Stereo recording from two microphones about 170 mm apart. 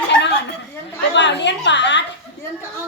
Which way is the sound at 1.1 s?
90° left.